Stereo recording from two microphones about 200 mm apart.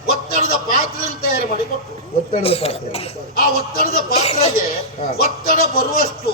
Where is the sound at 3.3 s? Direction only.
50° left (ahead or behind).